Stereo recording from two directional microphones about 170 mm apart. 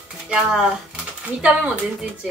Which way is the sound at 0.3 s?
5° right (ahead or behind).